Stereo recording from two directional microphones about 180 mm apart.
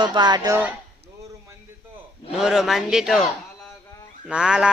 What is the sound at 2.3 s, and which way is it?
A man's voice, 5° right (ahead or behind).